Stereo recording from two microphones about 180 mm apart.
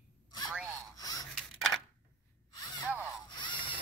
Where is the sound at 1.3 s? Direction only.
5° left (ahead or behind).